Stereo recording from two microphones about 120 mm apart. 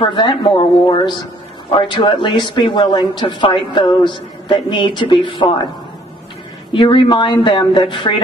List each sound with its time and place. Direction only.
0.0 s a woman's voice: 45° left (ahead or behind)
6.7 s a woman's voice: 45° left (ahead or behind)